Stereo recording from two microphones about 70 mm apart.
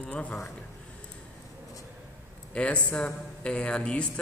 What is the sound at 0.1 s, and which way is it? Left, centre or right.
Speech, centre.